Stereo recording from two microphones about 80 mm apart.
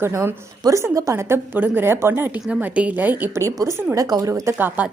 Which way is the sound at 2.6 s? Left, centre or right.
Centre.